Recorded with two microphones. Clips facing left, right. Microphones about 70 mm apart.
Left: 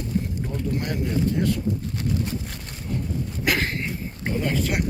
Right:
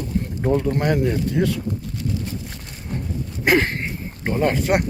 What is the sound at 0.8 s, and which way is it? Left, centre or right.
Speech, right.